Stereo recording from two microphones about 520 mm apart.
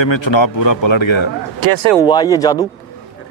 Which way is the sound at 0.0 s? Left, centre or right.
Left.